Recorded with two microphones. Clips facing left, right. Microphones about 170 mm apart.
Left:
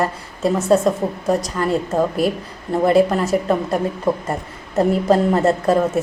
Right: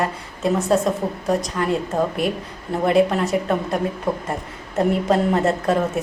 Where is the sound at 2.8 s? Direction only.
Centre (ahead or behind).